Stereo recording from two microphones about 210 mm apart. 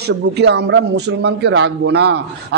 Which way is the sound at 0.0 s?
55° right (ahead or behind).